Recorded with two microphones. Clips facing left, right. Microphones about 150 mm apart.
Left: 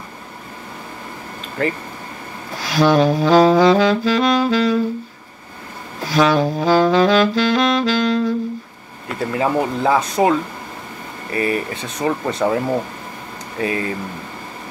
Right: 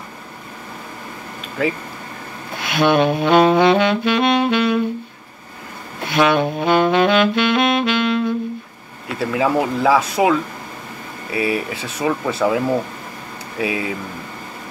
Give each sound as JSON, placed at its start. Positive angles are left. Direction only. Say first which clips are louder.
{"t": 2.5, "sound": "saxophone", "louder": "left 1 dB", "side_deg": 35}
{"t": 6.0, "sound": "saxophone", "louder": "left 1 dB", "side_deg": 35}
{"t": 9.2, "sound": "speech", "louder": "right 1 dB", "side_deg": -5}
{"t": 11.3, "sound": "speech", "louder": "even", "side_deg": -5}